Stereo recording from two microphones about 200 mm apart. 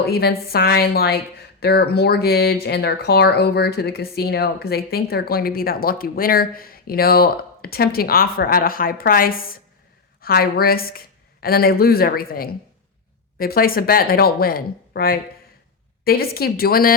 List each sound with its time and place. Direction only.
0.1 s a woman's voice: 50° left (ahead or behind)